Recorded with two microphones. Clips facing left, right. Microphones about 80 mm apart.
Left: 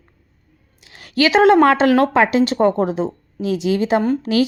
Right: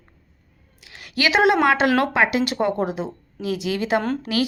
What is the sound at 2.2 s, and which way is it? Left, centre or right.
A woman's voice, left.